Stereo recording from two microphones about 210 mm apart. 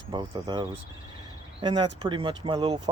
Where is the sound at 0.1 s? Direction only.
20° right (ahead or behind).